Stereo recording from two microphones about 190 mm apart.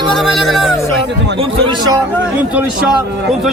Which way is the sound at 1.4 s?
25° right (ahead or behind).